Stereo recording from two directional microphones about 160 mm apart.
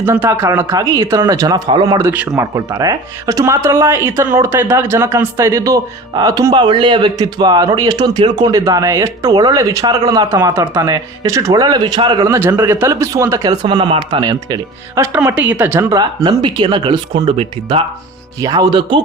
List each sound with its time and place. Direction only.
0.0 s speech: 15° right (ahead or behind)
2.0 s speech: 15° right (ahead or behind)
16.0 s speech: 30° right (ahead or behind)
18.4 s speech: 25° right (ahead or behind)